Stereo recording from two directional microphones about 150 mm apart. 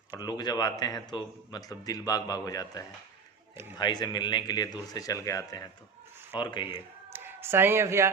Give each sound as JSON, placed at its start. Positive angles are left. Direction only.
{"t": 0.2, "sound": "a man's voice", "side_deg": 25}
{"t": 7.1, "sound": "speech", "side_deg": -15}